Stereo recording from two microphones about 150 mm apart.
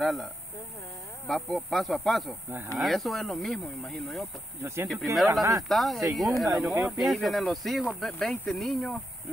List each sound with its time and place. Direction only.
0.0 s speech: centre (ahead or behind)
4.6 s speech: 15° right (ahead or behind)
5.1 s speech: centre (ahead or behind)